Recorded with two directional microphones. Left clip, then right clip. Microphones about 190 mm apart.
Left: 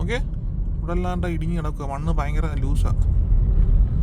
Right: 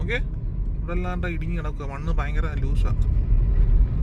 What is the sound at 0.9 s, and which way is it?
Speech, 35° left (ahead or behind).